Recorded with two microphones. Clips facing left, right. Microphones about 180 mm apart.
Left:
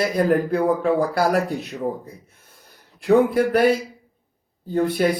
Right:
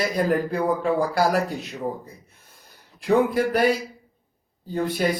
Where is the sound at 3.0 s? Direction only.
55° left (ahead or behind).